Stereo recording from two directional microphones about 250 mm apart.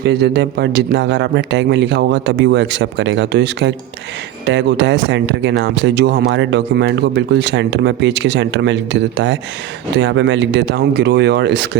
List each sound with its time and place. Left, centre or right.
0.0 s speech: right